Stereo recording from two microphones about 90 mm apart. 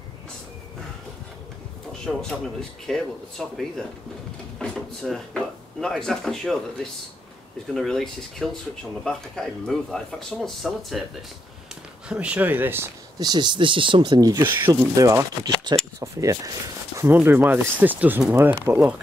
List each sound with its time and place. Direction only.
2.1 s speech: 5° right (ahead or behind)
12.1 s speech: 15° right (ahead or behind)
13.2 s speech: 55° right (ahead or behind)
14.2 s speech: 45° right (ahead or behind)
17.1 s speech: 25° right (ahead or behind)